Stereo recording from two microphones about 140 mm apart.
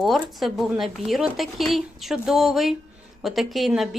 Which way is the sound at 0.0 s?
Centre (ahead or behind).